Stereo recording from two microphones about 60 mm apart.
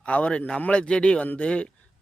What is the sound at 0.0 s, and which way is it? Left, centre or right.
A man's voice, left.